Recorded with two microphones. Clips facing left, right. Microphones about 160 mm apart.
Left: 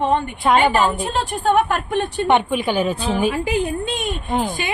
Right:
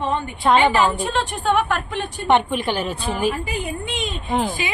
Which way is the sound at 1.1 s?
40° left (ahead or behind).